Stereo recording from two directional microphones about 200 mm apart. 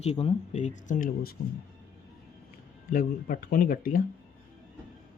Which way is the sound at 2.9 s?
45° left (ahead or behind).